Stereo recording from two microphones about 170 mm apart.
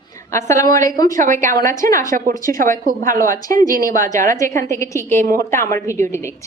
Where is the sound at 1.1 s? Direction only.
50° right (ahead or behind).